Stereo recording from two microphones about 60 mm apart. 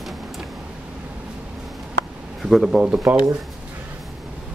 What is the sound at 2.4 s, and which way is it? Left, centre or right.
Speech, centre.